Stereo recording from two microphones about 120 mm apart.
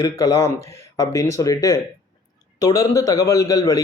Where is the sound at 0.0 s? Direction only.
25° left (ahead or behind).